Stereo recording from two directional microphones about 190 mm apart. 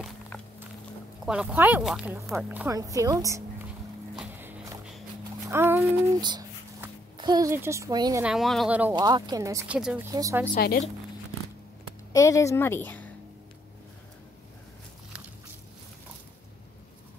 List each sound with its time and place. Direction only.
1.2 s speech: 5° right (ahead or behind)
2.7 s a woman's voice: 20° right (ahead or behind)
4.1 s music: 5° right (ahead or behind)
5.5 s a sound: 10° right (ahead or behind)
7.2 s speech: 20° right (ahead or behind)
8.2 s speech: 5° right (ahead or behind)
8.9 s speech: 20° right (ahead or behind)
9.8 s speech: 5° right (ahead or behind)
10.1 s speech: 15° right (ahead or behind)
10.5 s speech: 50° left (ahead or behind)
12.1 s a woman's voice: 15° left (ahead or behind)